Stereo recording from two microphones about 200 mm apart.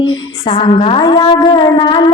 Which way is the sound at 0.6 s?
25° left (ahead or behind).